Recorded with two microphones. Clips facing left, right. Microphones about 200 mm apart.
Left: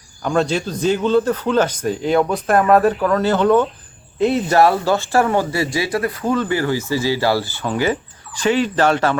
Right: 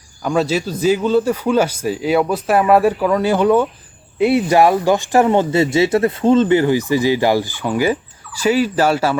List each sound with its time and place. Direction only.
0.2 s speech: 5° right (ahead or behind)